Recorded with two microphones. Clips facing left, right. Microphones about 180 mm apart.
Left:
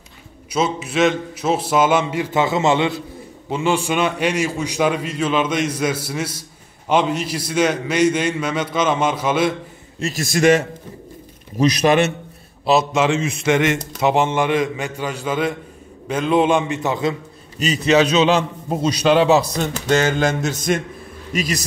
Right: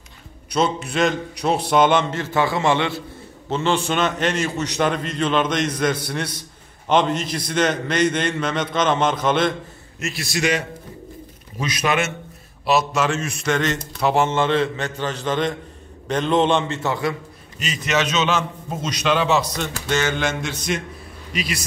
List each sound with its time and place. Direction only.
0.5 s a man's voice: 5° left (ahead or behind)
9.9 s a man's voice: 35° left (ahead or behind)
10.2 s a man's voice: 50° left (ahead or behind)
11.5 s a man's voice: 35° left (ahead or behind)
12.6 s a man's voice: 25° left (ahead or behind)
17.8 s a man's voice: 35° left (ahead or behind)